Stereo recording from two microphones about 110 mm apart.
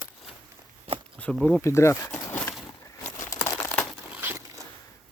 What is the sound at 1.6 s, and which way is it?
Speech, 25° left (ahead or behind).